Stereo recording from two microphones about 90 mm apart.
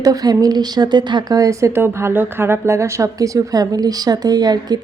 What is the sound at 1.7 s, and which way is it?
A woman's voice, 25° right (ahead or behind).